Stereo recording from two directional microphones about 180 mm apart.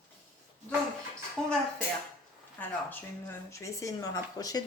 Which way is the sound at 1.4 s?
5° left (ahead or behind).